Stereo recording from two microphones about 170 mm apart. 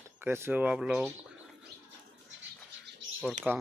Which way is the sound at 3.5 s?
5° right (ahead or behind).